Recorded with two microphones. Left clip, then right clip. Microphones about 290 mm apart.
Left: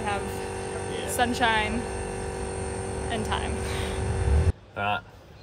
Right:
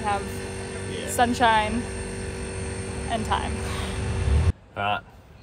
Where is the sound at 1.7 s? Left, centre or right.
Left.